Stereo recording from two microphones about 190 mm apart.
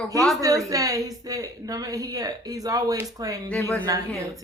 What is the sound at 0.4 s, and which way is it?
Speech, 20° right (ahead or behind).